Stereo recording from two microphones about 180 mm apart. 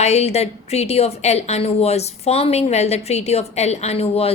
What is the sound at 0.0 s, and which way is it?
A woman's voice, 35° left (ahead or behind).